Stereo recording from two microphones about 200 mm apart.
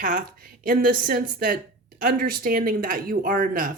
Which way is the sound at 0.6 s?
45° right (ahead or behind).